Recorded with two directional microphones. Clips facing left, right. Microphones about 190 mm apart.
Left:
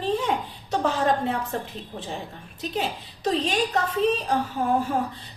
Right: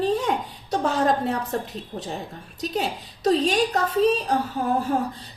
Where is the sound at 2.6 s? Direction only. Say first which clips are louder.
Right 2 dB; 40° right (ahead or behind).